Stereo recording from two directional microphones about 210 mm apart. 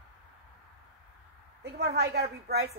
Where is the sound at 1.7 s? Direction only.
50° right (ahead or behind).